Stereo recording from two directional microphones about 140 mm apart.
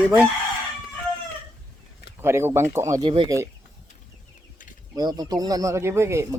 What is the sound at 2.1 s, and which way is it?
Speech, 15° right (ahead or behind).